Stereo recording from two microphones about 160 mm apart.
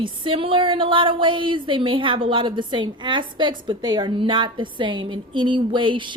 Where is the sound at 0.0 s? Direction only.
35° right (ahead or behind).